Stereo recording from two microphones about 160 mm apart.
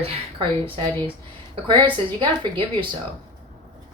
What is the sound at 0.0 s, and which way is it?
Speech, 35° right (ahead or behind).